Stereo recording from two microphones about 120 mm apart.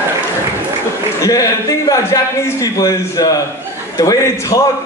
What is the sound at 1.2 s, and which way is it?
A man's voice, 30° left (ahead or behind).